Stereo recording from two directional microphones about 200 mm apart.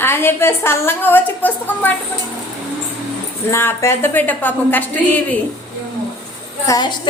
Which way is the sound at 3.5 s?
15° left (ahead or behind).